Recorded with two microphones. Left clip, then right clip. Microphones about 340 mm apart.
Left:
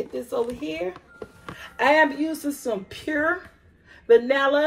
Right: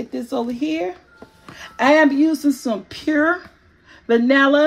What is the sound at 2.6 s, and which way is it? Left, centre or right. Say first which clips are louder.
Speech: right 4 dB; right.